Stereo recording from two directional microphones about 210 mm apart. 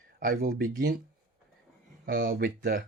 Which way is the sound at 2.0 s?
45° right (ahead or behind).